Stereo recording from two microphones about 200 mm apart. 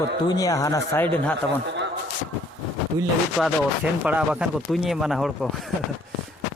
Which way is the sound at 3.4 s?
5° left (ahead or behind).